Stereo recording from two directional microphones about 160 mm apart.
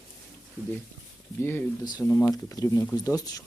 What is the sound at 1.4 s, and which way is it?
Speech, 15° left (ahead or behind).